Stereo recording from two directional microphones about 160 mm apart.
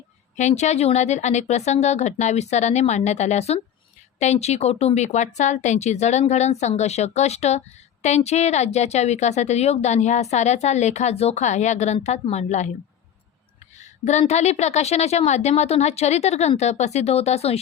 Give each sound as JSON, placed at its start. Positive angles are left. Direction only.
{"t": 0.3, "sound": "speech", "side_deg": 45}
{"t": 13.7, "sound": "speech", "side_deg": 45}